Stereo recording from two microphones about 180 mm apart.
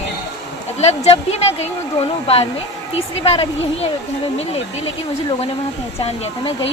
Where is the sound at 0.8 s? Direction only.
35° left (ahead or behind).